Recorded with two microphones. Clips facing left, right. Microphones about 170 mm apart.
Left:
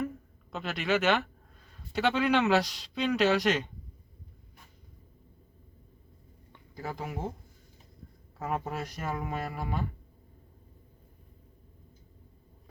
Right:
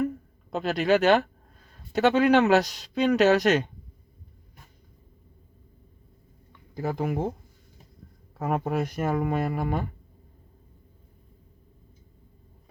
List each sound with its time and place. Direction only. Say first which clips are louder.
0.5 s speech: right 7 dB; 40° right (ahead or behind)
6.8 s speech: right 9 dB; 55° right (ahead or behind)
8.4 s speech: right 7 dB; 60° right (ahead or behind)